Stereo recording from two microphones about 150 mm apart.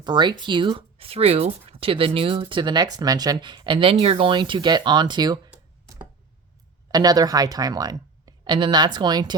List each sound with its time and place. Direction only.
0.0 s speech: 30° right (ahead or behind)
6.9 s speech: 25° right (ahead or behind)